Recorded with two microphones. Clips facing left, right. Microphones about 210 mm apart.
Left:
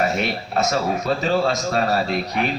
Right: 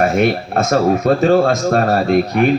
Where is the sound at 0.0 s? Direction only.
50° right (ahead or behind).